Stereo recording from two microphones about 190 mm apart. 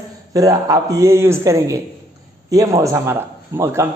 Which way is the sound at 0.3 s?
20° right (ahead or behind).